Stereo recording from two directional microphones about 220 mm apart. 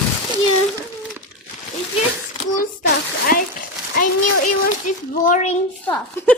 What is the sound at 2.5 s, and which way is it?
A child's voice, 40° left (ahead or behind).